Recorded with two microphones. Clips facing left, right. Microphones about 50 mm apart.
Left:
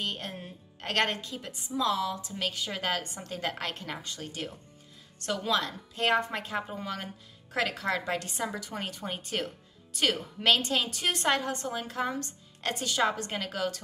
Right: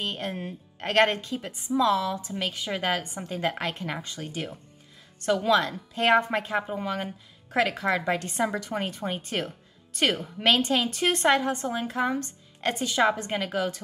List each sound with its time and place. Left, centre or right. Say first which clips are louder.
0.0 s a woman's voice: right 4 dB; right